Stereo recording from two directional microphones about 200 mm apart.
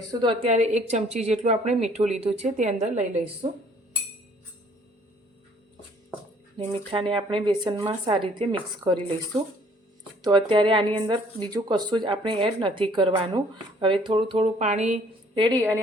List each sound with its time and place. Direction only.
0.1 s a woman's voice: 25° right (ahead or behind)
6.9 s speech: 25° right (ahead or behind)
15.4 s speech: 20° right (ahead or behind)